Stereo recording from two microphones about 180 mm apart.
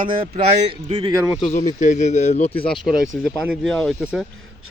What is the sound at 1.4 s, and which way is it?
Speech, 45° left (ahead or behind).